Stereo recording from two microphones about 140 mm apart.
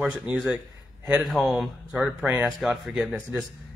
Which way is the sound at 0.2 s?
5° right (ahead or behind).